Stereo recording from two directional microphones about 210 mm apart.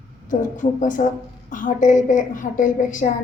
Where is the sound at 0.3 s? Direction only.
35° left (ahead or behind).